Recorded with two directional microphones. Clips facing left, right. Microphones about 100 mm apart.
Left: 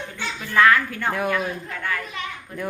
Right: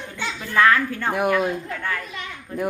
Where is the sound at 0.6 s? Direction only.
30° right (ahead or behind).